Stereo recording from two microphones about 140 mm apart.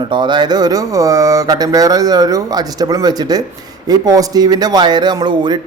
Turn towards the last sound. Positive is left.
turn(degrees=-30)  # may be behind; listen again after turning